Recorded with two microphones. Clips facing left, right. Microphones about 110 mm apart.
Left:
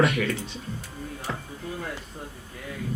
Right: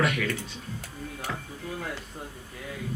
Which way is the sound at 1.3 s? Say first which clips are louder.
Left 2 dB; 30° left (ahead or behind).